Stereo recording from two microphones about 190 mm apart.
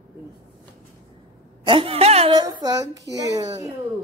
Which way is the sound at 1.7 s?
30° right (ahead or behind).